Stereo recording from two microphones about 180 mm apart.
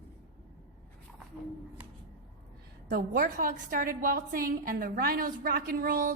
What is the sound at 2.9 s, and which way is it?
A woman's voice, 45° right (ahead or behind).